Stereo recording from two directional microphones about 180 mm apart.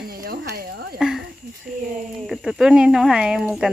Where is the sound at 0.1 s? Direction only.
55° right (ahead or behind).